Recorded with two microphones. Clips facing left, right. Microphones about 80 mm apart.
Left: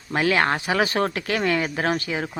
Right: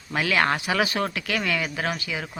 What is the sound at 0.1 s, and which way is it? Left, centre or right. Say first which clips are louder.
Speech: left 2 dB; left.